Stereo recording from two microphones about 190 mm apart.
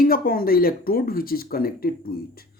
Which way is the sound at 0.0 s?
50° left (ahead or behind).